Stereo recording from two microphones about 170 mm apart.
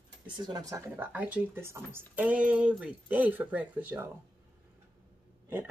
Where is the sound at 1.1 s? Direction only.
10° right (ahead or behind).